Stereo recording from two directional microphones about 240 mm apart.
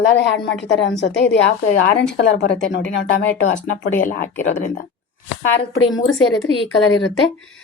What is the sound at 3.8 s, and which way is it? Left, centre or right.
Speech, left.